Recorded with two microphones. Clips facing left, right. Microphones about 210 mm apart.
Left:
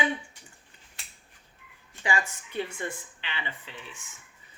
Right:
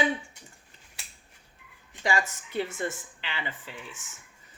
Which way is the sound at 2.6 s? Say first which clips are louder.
Right 3 dB; 45° right (ahead or behind).